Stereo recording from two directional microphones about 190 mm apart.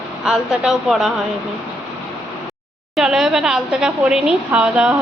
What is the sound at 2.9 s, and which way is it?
A woman's voice, 5° right (ahead or behind).